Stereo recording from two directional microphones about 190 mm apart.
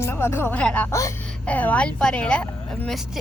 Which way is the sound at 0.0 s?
15° left (ahead or behind).